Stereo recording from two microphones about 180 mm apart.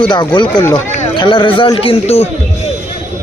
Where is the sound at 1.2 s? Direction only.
25° left (ahead or behind).